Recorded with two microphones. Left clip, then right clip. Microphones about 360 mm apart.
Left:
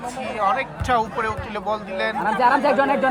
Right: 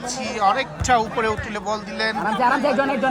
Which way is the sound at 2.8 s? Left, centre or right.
Left.